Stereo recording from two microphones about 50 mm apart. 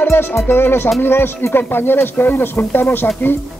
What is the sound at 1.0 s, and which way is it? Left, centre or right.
Speech, left.